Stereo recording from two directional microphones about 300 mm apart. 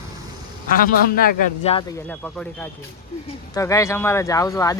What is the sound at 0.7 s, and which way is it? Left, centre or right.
A man's voice, left.